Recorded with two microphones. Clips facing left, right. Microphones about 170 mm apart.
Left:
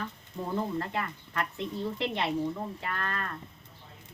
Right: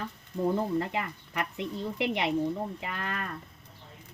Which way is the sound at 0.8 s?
15° right (ahead or behind).